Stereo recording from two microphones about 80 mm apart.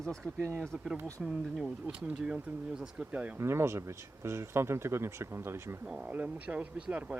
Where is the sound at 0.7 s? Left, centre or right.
Centre.